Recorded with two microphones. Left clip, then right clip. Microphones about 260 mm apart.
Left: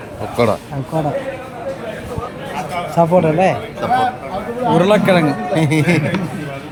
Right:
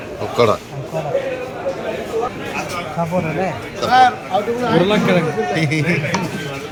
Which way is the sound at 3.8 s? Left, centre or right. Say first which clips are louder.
Right 4 dB; centre.